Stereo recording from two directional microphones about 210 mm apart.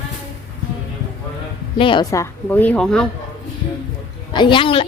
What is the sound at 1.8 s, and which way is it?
Speech, 25° left (ahead or behind).